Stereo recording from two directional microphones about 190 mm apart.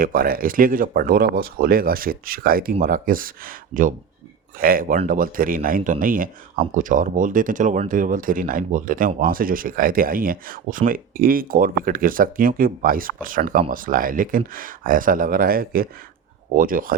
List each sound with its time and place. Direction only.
0.0 s speech: 50° right (ahead or behind)